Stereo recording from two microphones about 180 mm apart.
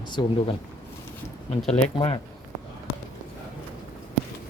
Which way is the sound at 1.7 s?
30° left (ahead or behind).